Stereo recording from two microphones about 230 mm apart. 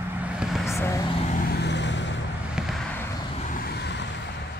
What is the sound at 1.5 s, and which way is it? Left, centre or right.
Vehicle, left.